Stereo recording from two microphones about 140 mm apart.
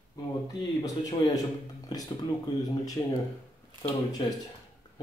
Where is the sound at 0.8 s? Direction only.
25° left (ahead or behind).